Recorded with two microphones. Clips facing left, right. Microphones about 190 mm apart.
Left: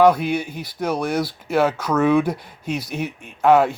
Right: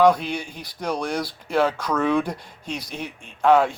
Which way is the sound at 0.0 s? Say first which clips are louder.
Left 2 dB; 5° left (ahead or behind).